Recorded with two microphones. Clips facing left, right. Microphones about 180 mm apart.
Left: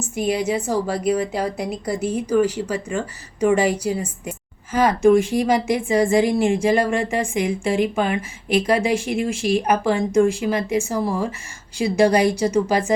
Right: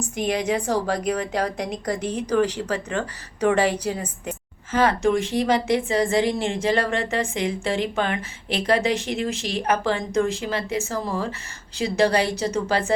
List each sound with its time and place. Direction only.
0.0 s a woman's voice: 5° left (ahead or behind)